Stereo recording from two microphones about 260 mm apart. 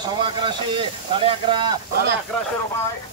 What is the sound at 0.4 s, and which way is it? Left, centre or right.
Speech, centre.